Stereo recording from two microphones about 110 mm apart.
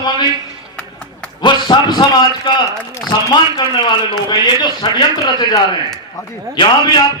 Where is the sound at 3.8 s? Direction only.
45° left (ahead or behind).